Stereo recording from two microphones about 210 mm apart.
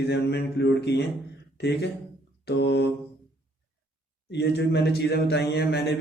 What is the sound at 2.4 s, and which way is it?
Mantra, 55° left (ahead or behind).